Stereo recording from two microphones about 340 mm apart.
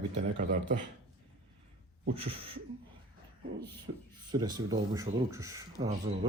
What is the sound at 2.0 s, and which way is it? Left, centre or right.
Speech, centre.